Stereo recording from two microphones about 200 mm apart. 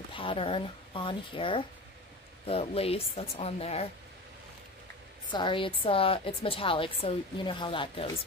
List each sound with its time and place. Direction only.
0.1 s a woman's voice: 25° left (ahead or behind)
5.3 s a woman's voice: 25° left (ahead or behind)